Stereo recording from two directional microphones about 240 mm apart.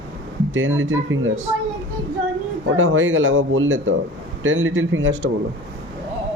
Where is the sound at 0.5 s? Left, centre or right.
Right.